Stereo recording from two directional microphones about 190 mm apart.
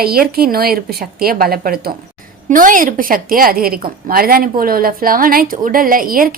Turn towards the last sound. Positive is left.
turn(degrees=-50)  # may be behind; listen again after turning